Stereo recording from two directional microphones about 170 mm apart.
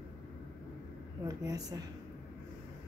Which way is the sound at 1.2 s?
20° right (ahead or behind).